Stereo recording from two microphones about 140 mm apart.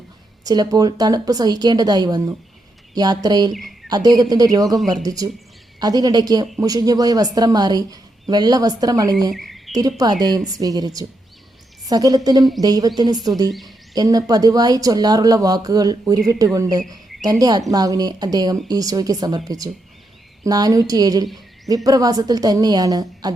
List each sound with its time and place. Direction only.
0.4 s speech: 25° right (ahead or behind)
3.5 s speech: centre (ahead or behind)
3.8 s speech: 25° right (ahead or behind)
9.3 s a sound: centre (ahead or behind)
10.0 s speech: 30° right (ahead or behind)
13.5 s speech: centre (ahead or behind)
13.9 s speech: 25° right (ahead or behind)